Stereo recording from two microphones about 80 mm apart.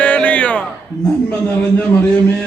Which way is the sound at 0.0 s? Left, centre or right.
Centre.